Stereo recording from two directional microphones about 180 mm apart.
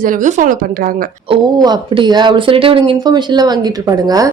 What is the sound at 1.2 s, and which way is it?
A woman's voice, 25° right (ahead or behind).